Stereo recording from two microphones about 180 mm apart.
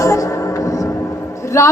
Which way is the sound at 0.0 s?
15° left (ahead or behind).